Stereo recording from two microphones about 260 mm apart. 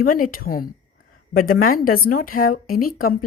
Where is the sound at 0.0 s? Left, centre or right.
Left.